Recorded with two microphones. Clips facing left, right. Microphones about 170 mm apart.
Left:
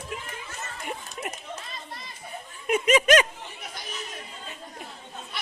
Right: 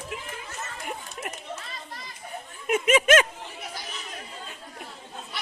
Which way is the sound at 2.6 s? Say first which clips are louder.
Even; 5° right (ahead or behind).